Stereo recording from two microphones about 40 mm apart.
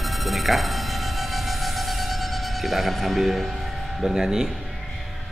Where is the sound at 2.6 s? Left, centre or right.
Centre.